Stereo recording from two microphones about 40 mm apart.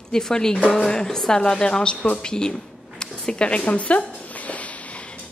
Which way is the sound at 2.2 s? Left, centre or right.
Centre.